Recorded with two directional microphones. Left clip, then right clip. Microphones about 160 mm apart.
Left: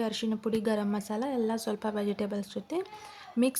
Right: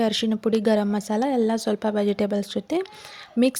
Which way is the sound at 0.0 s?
35° right (ahead or behind).